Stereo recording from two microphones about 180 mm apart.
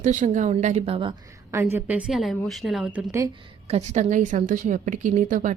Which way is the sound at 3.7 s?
40° right (ahead or behind).